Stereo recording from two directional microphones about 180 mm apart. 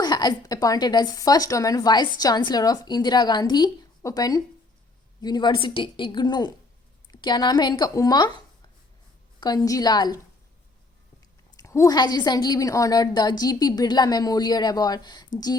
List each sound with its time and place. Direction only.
0.0 s a woman's voice: 25° left (ahead or behind)
9.4 s a woman's voice: 20° left (ahead or behind)
11.5 s a woman's voice: 15° left (ahead or behind)